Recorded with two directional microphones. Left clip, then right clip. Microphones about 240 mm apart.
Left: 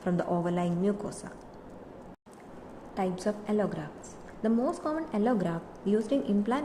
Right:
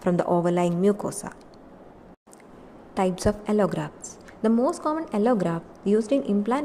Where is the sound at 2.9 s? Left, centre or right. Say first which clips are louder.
Right 7 dB; right.